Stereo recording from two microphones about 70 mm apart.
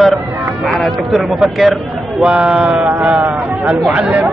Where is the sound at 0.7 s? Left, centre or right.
Centre.